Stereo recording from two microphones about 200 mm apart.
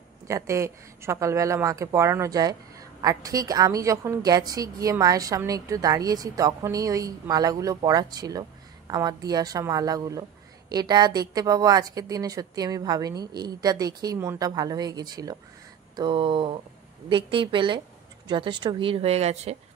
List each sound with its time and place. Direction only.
0.3 s a woman's voice: 15° right (ahead or behind); by 19.5 s 30° right (ahead or behind)